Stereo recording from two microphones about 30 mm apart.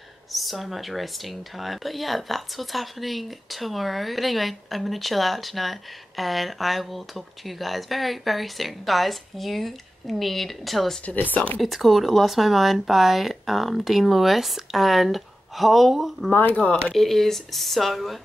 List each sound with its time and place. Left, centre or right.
0.3 s speech: centre
11.1 s speech: left
11.6 s speech: centre
16.9 s speech: centre